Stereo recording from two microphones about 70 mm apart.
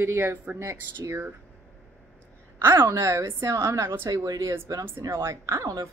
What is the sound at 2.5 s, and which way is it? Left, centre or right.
A woman's voice, right.